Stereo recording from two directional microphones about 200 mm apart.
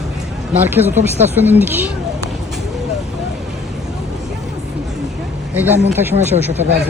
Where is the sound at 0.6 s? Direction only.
10° right (ahead or behind).